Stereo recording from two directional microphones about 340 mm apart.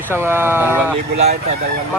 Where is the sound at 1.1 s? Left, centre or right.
Centre.